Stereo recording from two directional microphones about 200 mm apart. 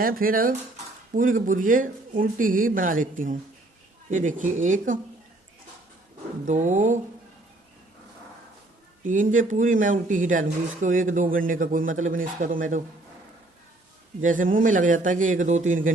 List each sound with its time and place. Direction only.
0.0 s speech: 45° right (ahead or behind)
6.4 s speech: 35° right (ahead or behind)
9.0 s speech: 40° right (ahead or behind)
14.2 s speech: 40° right (ahead or behind)